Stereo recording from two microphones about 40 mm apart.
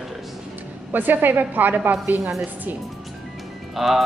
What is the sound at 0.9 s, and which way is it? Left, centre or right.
A woman's voice, right.